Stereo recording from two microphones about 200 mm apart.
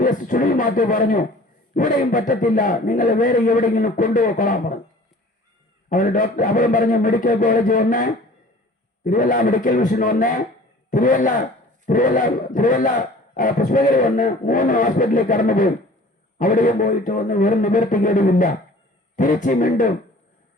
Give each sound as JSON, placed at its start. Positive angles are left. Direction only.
{"t": 0.0, "sound": "a sound", "side_deg": 40}
{"t": 1.7, "sound": "a man's voice", "side_deg": 40}
{"t": 5.9, "sound": "a man's voice", "side_deg": 40}